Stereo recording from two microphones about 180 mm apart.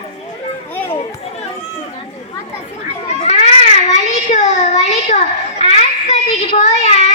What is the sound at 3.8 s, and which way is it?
Child singing, 40° left (ahead or behind).